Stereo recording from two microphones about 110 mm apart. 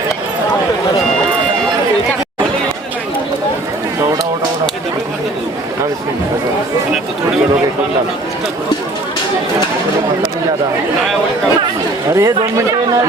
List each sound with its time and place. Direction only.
12.1 s speech: 30° right (ahead or behind)